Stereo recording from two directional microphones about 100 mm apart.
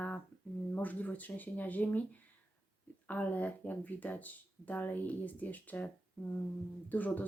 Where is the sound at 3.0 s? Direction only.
15° left (ahead or behind).